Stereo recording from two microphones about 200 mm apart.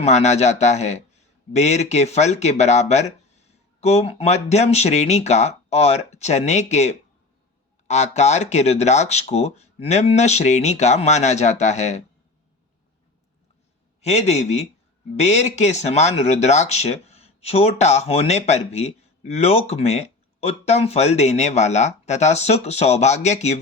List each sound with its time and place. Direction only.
0.0 s speech: 35° left (ahead or behind)
14.0 s speech: 35° left (ahead or behind)